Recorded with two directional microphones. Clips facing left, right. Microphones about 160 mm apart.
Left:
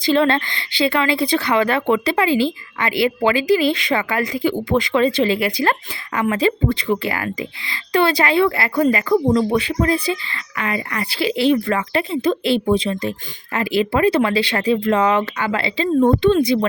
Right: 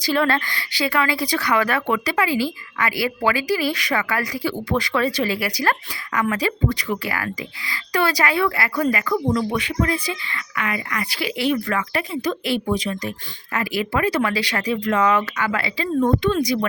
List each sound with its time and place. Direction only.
0.0 s a woman's voice: 25° left (ahead or behind)